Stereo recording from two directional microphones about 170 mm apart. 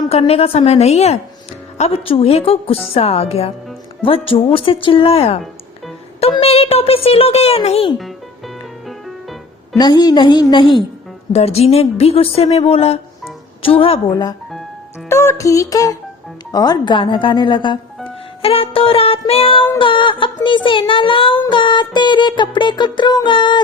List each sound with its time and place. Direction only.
0.1 s a woman's voice: 35° left (ahead or behind)
9.7 s music: 25° left (ahead or behind)
11.3 s a woman's voice: 40° left (ahead or behind)
15.1 s music: 15° left (ahead or behind)
18.4 s a woman's voice: 35° left (ahead or behind)
19.8 s music: 30° left (ahead or behind)